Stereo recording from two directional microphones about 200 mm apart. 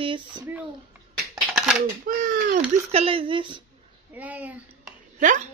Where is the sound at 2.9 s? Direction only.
30° right (ahead or behind).